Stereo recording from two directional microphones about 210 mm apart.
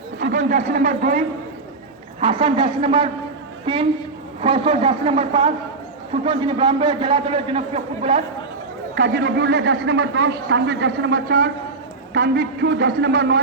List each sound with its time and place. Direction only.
0.2 s a man's voice: 40° right (ahead or behind)
2.2 s a man's voice: 25° right (ahead or behind)
4.4 s a man's voice: 25° right (ahead or behind)
9.0 s a man's voice: 50° right (ahead or behind)